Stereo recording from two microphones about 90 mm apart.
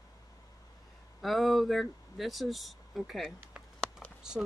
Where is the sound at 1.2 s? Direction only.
Centre (ahead or behind).